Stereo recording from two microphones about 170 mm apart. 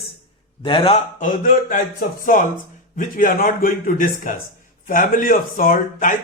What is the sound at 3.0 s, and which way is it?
Speech, 50° left (ahead or behind).